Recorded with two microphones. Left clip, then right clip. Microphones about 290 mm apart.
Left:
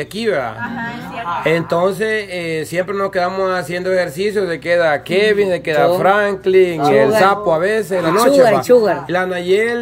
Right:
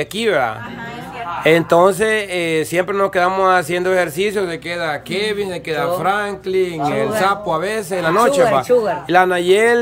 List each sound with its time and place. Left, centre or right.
0.2 s speech: centre
8.7 s speech: left
9.1 s speech: centre